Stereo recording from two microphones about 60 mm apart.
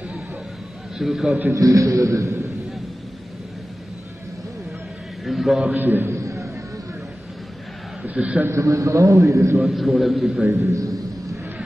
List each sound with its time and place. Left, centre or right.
0.9 s a man's voice: centre
1.5 s a man's voice: right
5.2 s a man's voice: centre
5.8 s a man's voice: right
6.0 s a sound: right
8.1 s a man's voice: right
8.5 s a man's voice: right
9.6 s a man's voice: centre
10.5 s a man's voice: right